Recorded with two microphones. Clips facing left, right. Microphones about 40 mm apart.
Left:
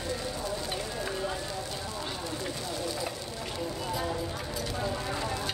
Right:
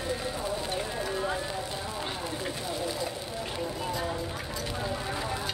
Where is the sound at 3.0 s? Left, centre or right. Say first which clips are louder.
Right 2 dB; centre.